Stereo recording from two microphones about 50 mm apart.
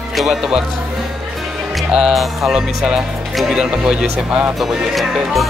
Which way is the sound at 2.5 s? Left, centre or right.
Centre.